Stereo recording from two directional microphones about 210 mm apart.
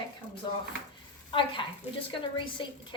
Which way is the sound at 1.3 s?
25° left (ahead or behind).